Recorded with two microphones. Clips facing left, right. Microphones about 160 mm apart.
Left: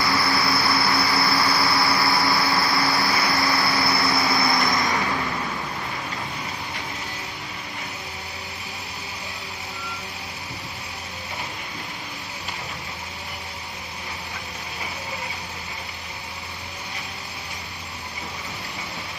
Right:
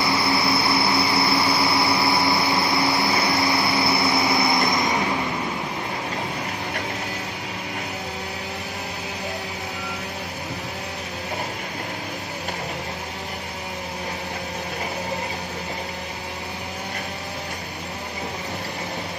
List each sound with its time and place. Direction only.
0.0 s train: 20° right (ahead or behind)